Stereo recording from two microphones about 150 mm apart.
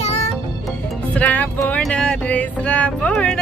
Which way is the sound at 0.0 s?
45° left (ahead or behind).